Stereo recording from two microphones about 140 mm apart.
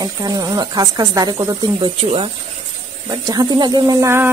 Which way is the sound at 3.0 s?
30° right (ahead or behind).